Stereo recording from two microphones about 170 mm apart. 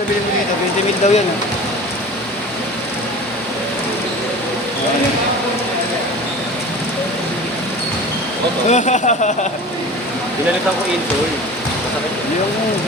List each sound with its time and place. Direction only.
1.0 s speech: 40° left (ahead or behind)
8.7 s speech: 45° left (ahead or behind)